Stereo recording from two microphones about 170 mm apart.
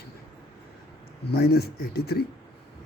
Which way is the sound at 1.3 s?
65° left (ahead or behind).